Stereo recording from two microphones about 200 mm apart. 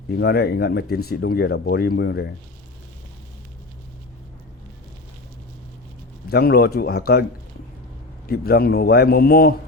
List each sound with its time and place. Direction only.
0.1 s a man's voice: 55° left (ahead or behind)
6.2 s a man's voice: 50° left (ahead or behind)
8.3 s a man's voice: 50° left (ahead or behind)